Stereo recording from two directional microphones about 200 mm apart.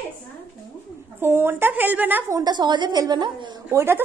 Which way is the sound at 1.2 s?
10° right (ahead or behind).